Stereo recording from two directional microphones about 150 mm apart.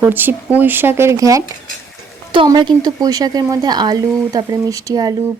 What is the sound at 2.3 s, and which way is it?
A woman's voice, 30° right (ahead or behind).